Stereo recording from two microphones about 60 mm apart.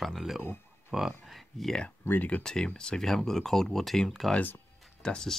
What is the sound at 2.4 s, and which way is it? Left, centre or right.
Speech, centre.